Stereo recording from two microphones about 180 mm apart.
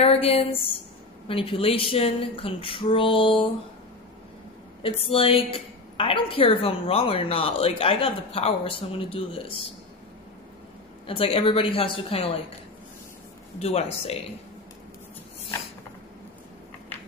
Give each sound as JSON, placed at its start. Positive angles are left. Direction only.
{"t": 0.0, "sound": "a woman's voice", "side_deg": 35}
{"t": 4.8, "sound": "a woman's voice", "side_deg": 30}
{"t": 11.1, "sound": "a woman's voice", "side_deg": 30}
{"t": 13.6, "sound": "a woman's voice", "side_deg": 35}